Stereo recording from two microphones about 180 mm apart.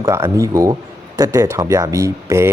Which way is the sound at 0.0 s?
15° right (ahead or behind).